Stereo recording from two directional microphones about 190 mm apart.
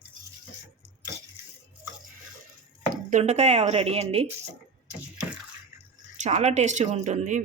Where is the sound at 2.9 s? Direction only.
40° right (ahead or behind).